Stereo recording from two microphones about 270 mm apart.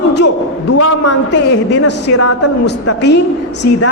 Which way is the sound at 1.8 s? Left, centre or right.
Left.